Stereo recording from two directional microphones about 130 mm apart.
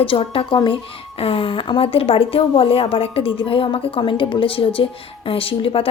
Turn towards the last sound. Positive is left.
turn(degrees=45)  # may be behind; listen again after turning